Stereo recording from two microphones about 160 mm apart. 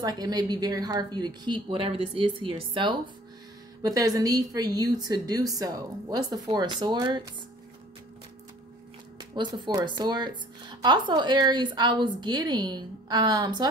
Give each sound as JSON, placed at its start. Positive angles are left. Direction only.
{"t": 0.0, "sound": "speech", "side_deg": -25}
{"t": 9.2, "sound": "speech", "side_deg": -25}